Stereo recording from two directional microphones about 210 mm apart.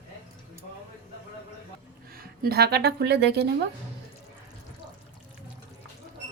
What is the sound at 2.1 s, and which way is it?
Speech, 45° right (ahead or behind).